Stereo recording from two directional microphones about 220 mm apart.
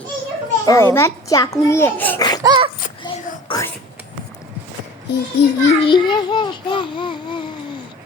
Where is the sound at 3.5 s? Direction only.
25° left (ahead or behind).